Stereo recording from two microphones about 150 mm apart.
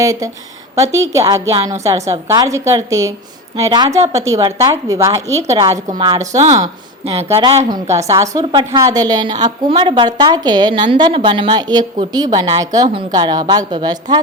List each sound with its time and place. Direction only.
0.0 s a woman's voice: 20° right (ahead or behind)
7.0 s speech: 40° right (ahead or behind)
7.7 s a woman's voice: 20° right (ahead or behind)